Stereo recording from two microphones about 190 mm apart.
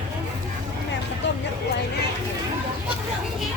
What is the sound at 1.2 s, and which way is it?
Vehicle, 70° left (ahead or behind).